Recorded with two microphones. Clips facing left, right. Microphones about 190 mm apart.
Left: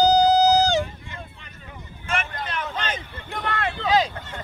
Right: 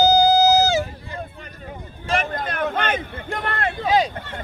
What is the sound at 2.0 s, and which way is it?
Speech, 35° right (ahead or behind).